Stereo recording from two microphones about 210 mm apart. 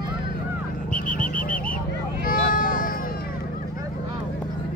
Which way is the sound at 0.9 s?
5° left (ahead or behind).